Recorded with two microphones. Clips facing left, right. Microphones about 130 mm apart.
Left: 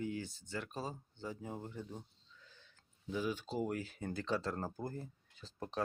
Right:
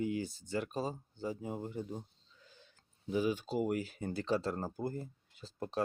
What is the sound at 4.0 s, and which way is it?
Speech, 35° right (ahead or behind).